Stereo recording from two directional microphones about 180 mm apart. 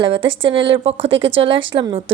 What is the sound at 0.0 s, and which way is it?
A woman's voice, 30° right (ahead or behind).